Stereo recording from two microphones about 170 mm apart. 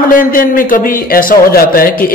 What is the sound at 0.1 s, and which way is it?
A man's voice, 55° left (ahead or behind).